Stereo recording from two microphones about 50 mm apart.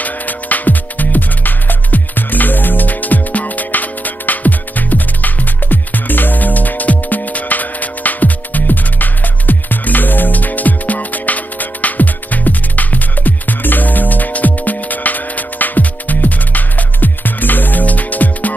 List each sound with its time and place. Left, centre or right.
0.0 s music: left